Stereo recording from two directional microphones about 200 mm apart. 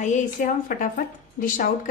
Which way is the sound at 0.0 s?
40° left (ahead or behind).